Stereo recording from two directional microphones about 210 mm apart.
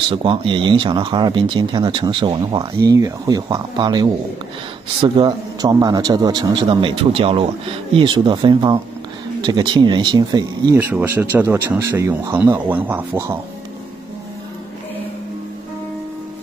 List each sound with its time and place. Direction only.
0.1 s speech: 25° right (ahead or behind)